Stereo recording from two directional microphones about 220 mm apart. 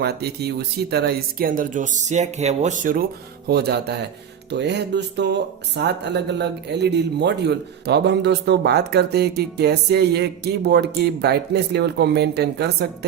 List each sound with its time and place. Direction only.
0.0 s speech: 45° right (ahead or behind)